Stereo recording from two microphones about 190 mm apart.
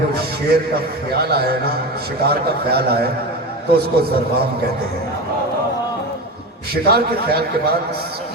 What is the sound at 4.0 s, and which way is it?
Speech, 55° right (ahead or behind).